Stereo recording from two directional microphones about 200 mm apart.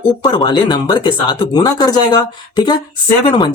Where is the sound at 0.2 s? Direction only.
20° left (ahead or behind).